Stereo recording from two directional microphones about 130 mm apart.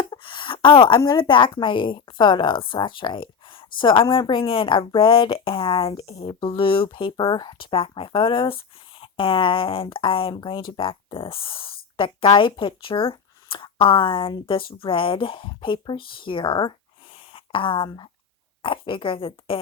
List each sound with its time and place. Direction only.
0.0 s a woman's voice: 40° left (ahead or behind)